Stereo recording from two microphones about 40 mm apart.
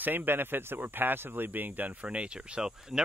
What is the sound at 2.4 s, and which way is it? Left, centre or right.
Speech, centre.